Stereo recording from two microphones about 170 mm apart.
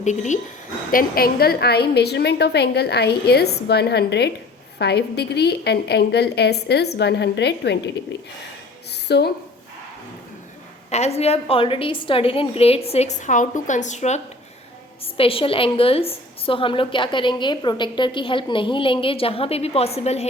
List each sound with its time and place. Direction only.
0.0 s a woman's voice: 45° left (ahead or behind)
0.9 s a woman's voice: 60° left (ahead or behind); by 8.3 s 90° left
8.9 s speech: 80° left
10.8 s a woman's voice: 40° left (ahead or behind)
15.0 s a woman's voice: 35° left (ahead or behind)